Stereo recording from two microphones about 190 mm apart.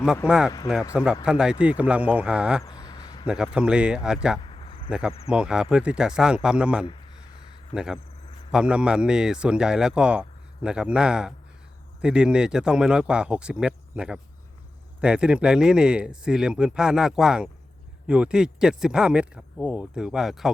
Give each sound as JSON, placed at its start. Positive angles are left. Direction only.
{"t": 0.3, "sound": "speech", "side_deg": -5}
{"t": 2.6, "sound": "a sound", "side_deg": 20}
{"t": 3.2, "sound": "speech", "side_deg": -5}
{"t": 4.4, "sound": "cricket", "side_deg": 30}
{"t": 4.9, "sound": "speech", "side_deg": -5}